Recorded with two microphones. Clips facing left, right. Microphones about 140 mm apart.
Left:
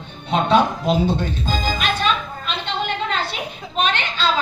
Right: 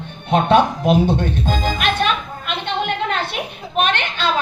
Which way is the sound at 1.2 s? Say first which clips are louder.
Right 3 dB; 60° right (ahead or behind).